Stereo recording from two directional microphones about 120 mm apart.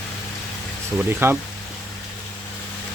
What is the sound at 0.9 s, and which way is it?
Speech, 20° right (ahead or behind).